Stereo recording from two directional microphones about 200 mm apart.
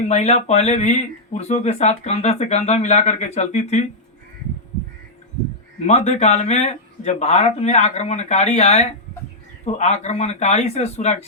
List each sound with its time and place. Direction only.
0.1 s speech: 35° left (ahead or behind)
5.8 s speech: 35° left (ahead or behind)